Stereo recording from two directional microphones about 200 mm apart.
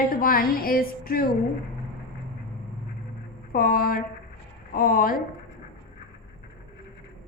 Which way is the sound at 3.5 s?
45° left (ahead or behind).